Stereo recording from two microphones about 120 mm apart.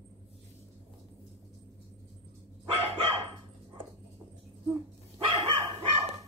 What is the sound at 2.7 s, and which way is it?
Dog, 50° right (ahead or behind).